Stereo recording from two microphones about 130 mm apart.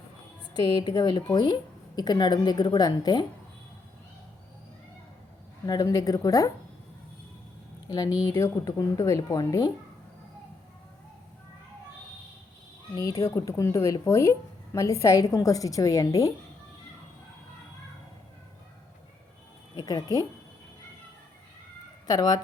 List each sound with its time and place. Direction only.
0.6 s a woman's voice: 30° left (ahead or behind)
5.6 s speech: 30° left (ahead or behind)
7.9 s speech: 30° left (ahead or behind)
12.9 s speech: 25° left (ahead or behind)
19.7 s speech: 30° left (ahead or behind)
22.0 s speech: 30° left (ahead or behind)